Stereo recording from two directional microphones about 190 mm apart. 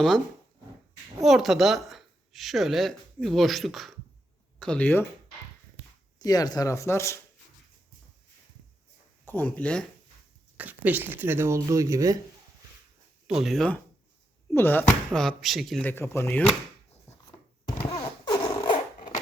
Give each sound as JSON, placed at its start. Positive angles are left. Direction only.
{"t": 1.2, "sound": "speech", "side_deg": 0}
{"t": 6.1, "sound": "speech", "side_deg": 20}
{"t": 9.2, "sound": "speech", "side_deg": 10}
{"t": 10.6, "sound": "speech", "side_deg": -10}
{"t": 13.2, "sound": "speech", "side_deg": -5}
{"t": 18.3, "sound": "a sound", "side_deg": 25}